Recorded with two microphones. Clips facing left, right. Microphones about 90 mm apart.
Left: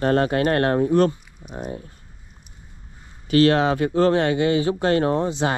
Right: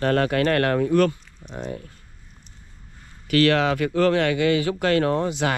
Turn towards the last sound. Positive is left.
turn(degrees=25)  # may be behind; listen again after turning